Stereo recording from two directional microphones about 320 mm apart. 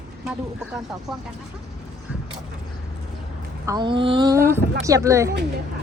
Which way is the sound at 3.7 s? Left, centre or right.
Centre.